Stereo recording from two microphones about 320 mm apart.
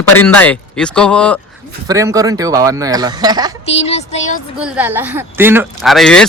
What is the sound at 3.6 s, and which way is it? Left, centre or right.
Speech, centre.